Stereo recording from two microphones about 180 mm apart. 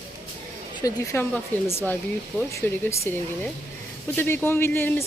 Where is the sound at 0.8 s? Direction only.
15° left (ahead or behind).